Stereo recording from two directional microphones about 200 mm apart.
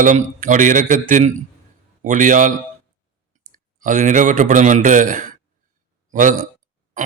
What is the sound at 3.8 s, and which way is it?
A man's voice, 40° right (ahead or behind).